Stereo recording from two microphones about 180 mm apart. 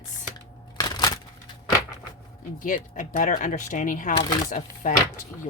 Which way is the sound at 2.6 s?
45° left (ahead or behind).